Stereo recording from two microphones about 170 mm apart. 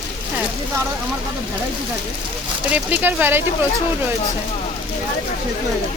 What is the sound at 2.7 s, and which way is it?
Speech, 10° right (ahead or behind).